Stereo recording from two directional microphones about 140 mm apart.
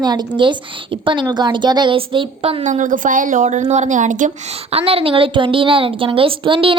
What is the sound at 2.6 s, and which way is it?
A woman's voice, 60° right (ahead or behind).